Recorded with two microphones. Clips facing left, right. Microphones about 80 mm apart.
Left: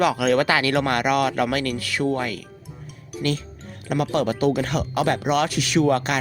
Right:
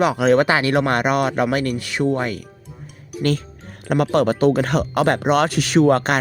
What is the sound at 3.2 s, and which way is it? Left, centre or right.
Speech, right.